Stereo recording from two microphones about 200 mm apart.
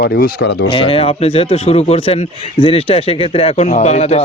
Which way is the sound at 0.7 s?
30° left (ahead or behind).